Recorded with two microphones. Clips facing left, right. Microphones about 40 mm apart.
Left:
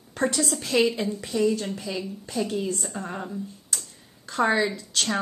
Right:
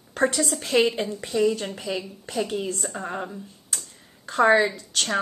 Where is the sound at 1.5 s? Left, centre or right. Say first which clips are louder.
Even; right.